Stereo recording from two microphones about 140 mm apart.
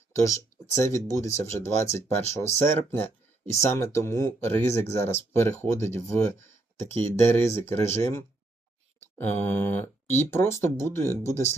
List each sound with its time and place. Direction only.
0.1 s speech: 20° left (ahead or behind)